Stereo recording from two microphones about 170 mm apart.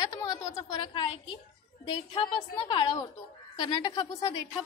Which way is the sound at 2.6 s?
30° left (ahead or behind).